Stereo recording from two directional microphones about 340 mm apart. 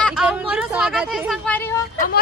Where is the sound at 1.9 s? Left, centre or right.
Left.